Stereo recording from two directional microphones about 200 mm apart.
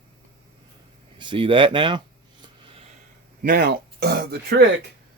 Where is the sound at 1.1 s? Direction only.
25° right (ahead or behind).